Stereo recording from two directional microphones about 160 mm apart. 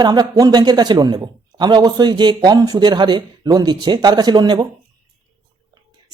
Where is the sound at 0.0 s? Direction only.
25° right (ahead or behind).